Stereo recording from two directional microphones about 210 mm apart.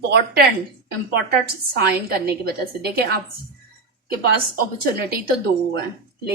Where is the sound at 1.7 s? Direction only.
50° right (ahead or behind).